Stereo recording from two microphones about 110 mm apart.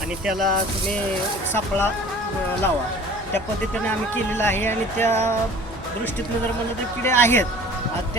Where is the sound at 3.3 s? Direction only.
15° left (ahead or behind).